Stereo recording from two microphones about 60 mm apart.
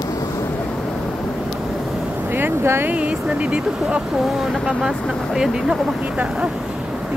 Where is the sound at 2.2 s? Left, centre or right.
Right.